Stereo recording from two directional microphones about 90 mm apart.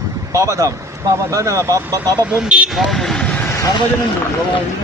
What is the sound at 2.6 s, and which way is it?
Speech, centre (ahead or behind).